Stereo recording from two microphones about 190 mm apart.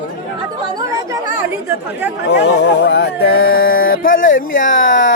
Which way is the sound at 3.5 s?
50° left (ahead or behind).